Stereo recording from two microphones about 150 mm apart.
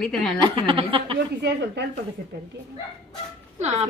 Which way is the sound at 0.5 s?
35° right (ahead or behind).